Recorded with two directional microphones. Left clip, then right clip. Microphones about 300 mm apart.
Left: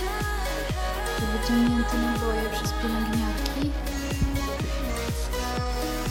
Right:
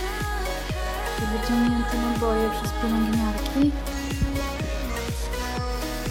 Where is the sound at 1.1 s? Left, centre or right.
Centre.